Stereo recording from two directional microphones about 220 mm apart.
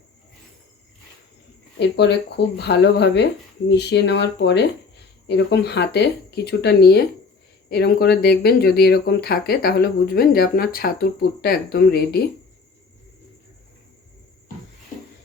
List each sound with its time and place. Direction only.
1.8 s speech: 50° left (ahead or behind)